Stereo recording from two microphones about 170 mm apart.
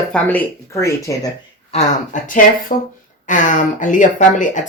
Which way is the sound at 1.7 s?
50° left (ahead or behind).